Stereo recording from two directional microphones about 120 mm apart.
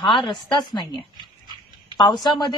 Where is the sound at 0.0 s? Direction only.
45° left (ahead or behind).